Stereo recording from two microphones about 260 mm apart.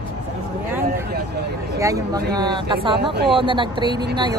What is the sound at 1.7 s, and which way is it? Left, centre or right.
Speech, centre.